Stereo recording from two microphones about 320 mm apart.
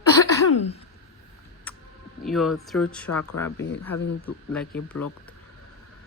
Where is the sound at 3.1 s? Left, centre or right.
Left.